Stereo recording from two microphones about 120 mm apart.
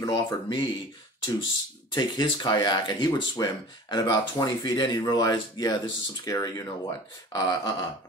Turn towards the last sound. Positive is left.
turn(degrees=35)  # may be behind; listen again after turning